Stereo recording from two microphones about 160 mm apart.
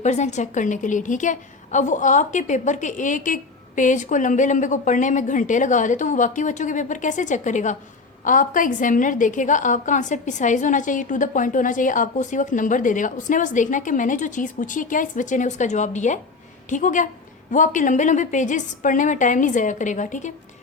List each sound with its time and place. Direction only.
0.0 s a woman's voice: 45° left (ahead or behind)